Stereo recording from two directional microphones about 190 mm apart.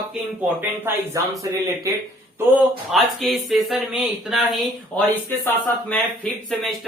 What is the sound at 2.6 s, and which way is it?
Speech, centre (ahead or behind).